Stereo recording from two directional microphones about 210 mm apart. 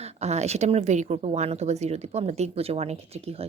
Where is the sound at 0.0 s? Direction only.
30° right (ahead or behind).